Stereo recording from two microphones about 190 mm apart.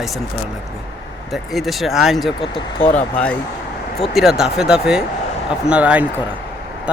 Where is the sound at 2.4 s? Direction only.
25° left (ahead or behind).